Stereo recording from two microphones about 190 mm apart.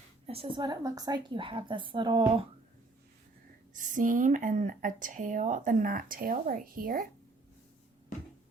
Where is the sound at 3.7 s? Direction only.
45° right (ahead or behind).